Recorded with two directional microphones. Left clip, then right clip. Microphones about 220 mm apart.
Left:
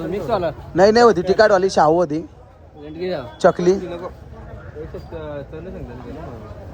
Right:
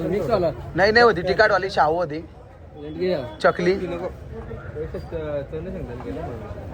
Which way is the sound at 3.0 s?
Centre (ahead or behind).